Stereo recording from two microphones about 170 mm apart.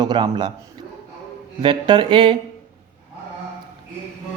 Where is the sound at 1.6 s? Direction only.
30° right (ahead or behind).